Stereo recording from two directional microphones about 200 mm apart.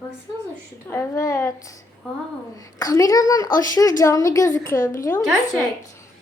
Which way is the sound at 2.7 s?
15° left (ahead or behind).